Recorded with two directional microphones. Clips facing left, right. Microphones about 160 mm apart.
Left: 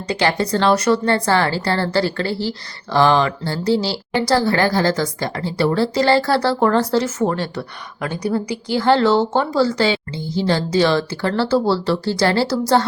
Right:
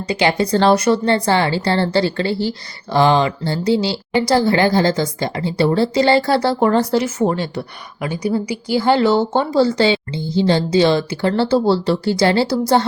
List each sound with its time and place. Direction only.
0.1 s a woman's voice: 15° right (ahead or behind)